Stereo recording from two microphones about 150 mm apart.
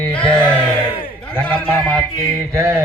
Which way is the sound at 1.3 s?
15° left (ahead or behind).